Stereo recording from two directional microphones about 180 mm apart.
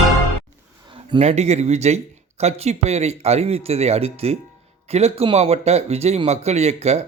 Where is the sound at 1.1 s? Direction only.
40° right (ahead or behind).